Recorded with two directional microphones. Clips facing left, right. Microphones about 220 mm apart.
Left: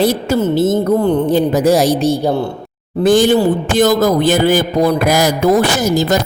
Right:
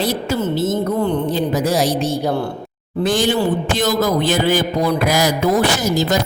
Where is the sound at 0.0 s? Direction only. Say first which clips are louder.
Left 6 dB; 50° left (ahead or behind).